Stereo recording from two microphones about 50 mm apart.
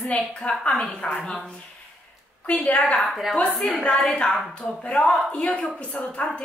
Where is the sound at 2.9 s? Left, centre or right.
Centre.